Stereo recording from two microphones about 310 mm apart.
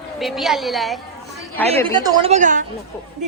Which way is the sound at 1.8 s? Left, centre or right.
Centre.